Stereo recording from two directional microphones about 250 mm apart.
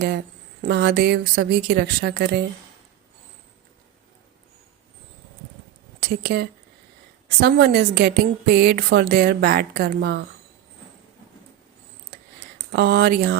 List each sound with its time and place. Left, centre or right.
0.6 s a woman's voice: right
6.0 s a woman's voice: right
12.7 s a woman's voice: right